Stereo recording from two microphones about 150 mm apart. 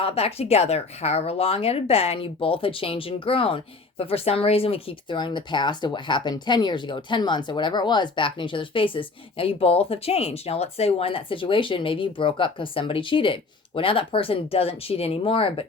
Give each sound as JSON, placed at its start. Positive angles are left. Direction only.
{"t": 0.0, "sound": "speech", "side_deg": 40}